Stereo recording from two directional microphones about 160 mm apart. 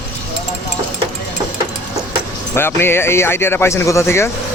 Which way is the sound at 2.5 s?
15° left (ahead or behind).